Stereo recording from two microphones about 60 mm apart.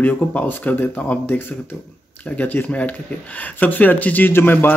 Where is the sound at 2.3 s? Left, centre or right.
Left.